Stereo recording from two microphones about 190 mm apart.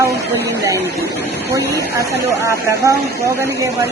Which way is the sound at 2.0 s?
15° right (ahead or behind).